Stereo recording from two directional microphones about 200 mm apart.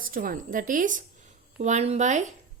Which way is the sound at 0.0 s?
45° right (ahead or behind).